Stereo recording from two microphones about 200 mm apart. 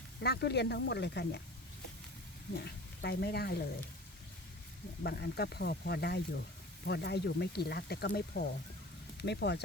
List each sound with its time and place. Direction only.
0.2 s speech: 55° left (ahead or behind)
2.6 s speech: 55° left (ahead or behind)
5.0 s speech: 55° left (ahead or behind)